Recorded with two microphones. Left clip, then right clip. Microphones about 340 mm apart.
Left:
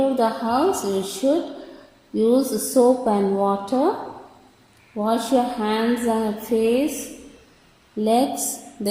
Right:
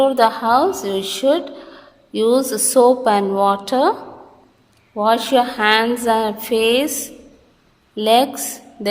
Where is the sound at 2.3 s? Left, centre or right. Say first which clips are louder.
Right 4 dB; right.